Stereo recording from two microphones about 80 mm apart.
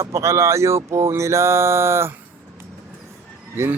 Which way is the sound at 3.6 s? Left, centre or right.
Right.